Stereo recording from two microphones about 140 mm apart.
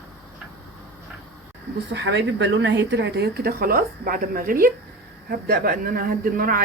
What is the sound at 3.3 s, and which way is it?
Speech, 90° right.